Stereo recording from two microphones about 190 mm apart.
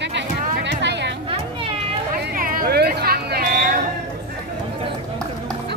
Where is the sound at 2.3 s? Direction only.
50° right (ahead or behind).